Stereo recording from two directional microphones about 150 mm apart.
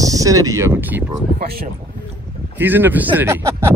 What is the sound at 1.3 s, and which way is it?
Speech, 90° right.